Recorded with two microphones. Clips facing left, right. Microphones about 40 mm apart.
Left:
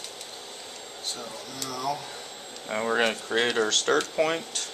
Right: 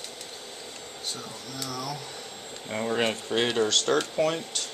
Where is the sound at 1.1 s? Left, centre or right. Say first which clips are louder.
Left 2 dB; centre.